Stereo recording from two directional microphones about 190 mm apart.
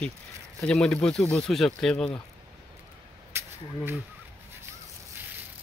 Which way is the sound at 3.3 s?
10° right (ahead or behind).